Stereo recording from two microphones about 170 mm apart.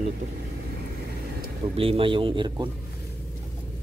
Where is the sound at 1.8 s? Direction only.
35° right (ahead or behind).